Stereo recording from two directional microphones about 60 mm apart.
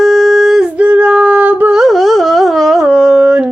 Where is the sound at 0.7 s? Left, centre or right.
Right.